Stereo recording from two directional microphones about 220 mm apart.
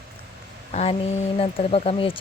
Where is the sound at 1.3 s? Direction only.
25° left (ahead or behind).